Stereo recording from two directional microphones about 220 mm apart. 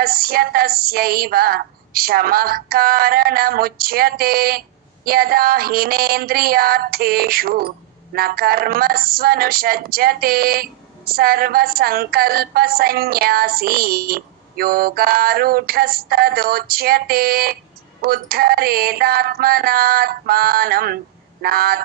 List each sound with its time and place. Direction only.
0.0 s female singing: 45° right (ahead or behind)